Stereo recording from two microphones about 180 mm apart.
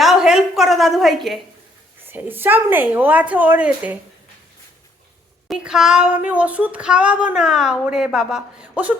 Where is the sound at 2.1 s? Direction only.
10° right (ahead or behind).